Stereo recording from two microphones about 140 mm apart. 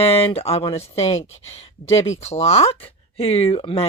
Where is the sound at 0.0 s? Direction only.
45° left (ahead or behind).